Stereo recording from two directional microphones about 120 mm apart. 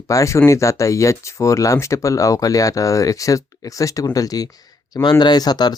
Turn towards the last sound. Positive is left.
turn(degrees=35)  # may be behind; listen again after turning